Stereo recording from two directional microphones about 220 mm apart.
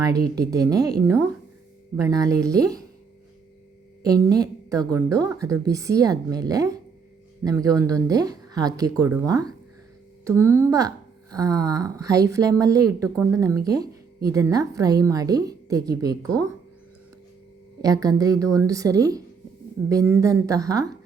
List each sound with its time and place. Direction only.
0.0 s speech: 15° right (ahead or behind)
4.0 s speech: 15° right (ahead or behind)
17.8 s speech: 15° right (ahead or behind)